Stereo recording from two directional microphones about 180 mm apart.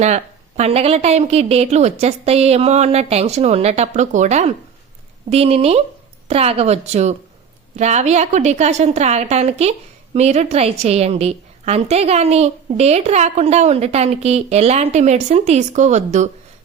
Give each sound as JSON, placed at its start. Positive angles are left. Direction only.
{"t": 0.0, "sound": "a woman's voice", "side_deg": -40}